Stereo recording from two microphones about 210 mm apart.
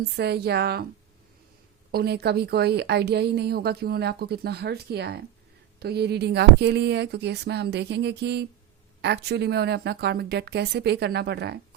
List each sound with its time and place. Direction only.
0.2 s a woman's voice: 50° right (ahead or behind)
1.9 s a woman's voice: 50° right (ahead or behind)